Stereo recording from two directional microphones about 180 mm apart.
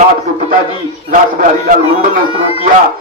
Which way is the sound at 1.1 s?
50° right (ahead or behind).